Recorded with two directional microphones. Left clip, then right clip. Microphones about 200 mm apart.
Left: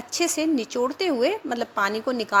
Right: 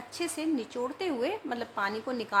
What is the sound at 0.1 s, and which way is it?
A woman's voice, 30° left (ahead or behind).